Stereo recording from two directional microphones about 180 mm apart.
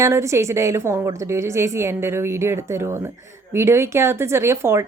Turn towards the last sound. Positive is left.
turn(degrees=-15)  # may be behind; listen again after turning